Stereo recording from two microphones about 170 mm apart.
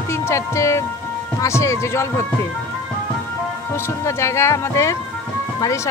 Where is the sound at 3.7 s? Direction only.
15° left (ahead or behind).